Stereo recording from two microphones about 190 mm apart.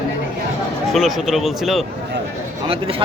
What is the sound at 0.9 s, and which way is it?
Speech, centre (ahead or behind).